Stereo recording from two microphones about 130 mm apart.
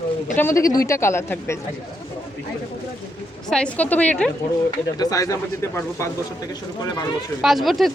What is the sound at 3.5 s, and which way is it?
Speech, 10° left (ahead or behind).